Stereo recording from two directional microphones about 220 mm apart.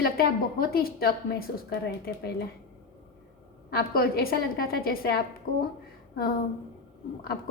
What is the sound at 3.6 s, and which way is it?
A woman's voice, 45° left (ahead or behind).